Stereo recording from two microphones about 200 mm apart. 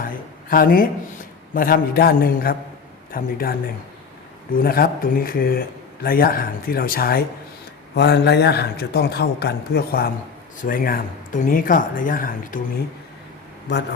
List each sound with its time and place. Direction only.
0.0 s a sound: 45° left (ahead or behind)
1.5 s speech: 45° left (ahead or behind)
4.5 s a man's voice: 50° left (ahead or behind)